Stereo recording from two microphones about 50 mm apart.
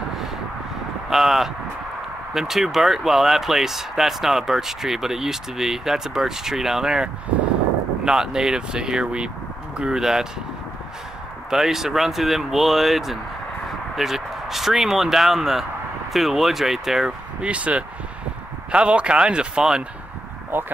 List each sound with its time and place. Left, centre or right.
1.1 s speech: centre
11.5 s speech: centre
17.4 s speech: right